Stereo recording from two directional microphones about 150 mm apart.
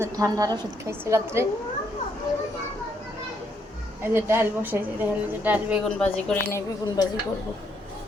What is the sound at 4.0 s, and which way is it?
A woman's voice, 15° right (ahead or behind).